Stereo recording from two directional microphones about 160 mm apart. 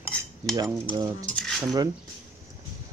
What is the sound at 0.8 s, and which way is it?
Speech, 25° right (ahead or behind).